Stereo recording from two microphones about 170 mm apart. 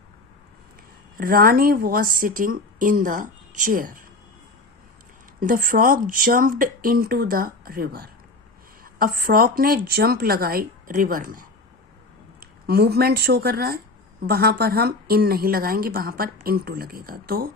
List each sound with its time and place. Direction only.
1.1 s speech: 55° right (ahead or behind)
5.4 s speech: 50° right (ahead or behind)
12.4 s speech: 65° right (ahead or behind)